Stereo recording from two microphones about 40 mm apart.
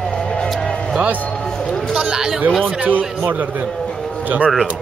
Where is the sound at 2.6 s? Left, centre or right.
Right.